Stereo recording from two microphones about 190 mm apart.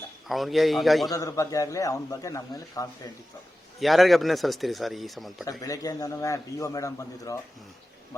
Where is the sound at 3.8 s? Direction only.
Centre (ahead or behind).